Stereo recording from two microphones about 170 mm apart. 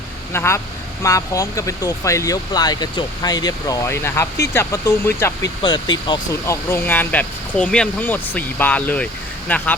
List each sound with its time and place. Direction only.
0.3 s speech: 15° left (ahead or behind)